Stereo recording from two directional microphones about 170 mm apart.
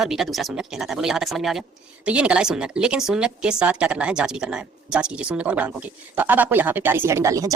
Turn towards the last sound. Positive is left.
turn(degrees=-20)  # may be behind; listen again after turning